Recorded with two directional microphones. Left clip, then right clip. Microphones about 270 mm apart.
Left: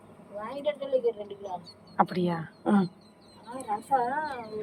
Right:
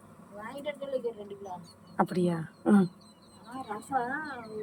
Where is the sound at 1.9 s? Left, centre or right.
Centre.